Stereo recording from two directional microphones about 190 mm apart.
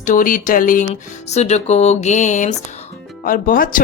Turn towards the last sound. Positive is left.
turn(degrees=45)  # may be behind; listen again after turning